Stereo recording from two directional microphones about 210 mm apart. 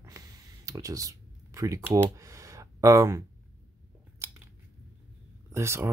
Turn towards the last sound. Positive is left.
turn(degrees=-10)  # may be behind; listen again after turning